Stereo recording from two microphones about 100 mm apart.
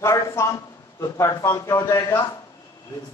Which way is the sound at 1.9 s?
50° left (ahead or behind).